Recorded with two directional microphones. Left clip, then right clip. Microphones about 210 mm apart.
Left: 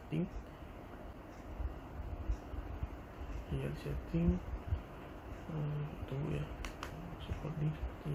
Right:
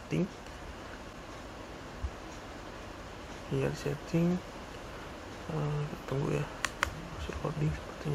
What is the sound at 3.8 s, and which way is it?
Speech, 20° right (ahead or behind).